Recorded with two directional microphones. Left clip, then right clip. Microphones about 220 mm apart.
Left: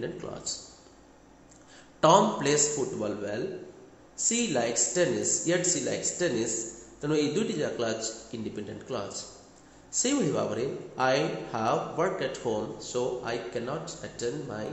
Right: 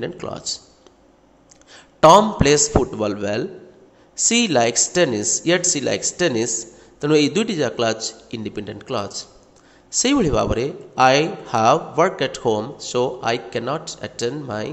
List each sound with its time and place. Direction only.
0.0 s a man's voice: 30° right (ahead or behind)
1.7 s a man's voice: 30° right (ahead or behind)